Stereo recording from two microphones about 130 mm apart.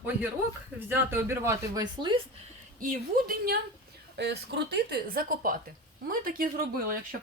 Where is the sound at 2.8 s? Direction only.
90° right.